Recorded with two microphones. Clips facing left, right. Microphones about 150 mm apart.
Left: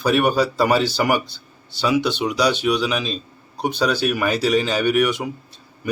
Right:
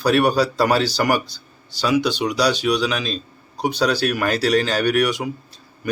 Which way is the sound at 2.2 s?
5° left (ahead or behind).